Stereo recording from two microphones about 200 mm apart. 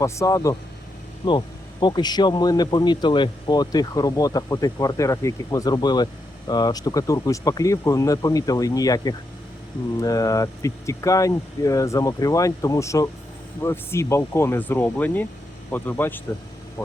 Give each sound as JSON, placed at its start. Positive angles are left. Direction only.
{"t": 0.0, "sound": "speech", "side_deg": 15}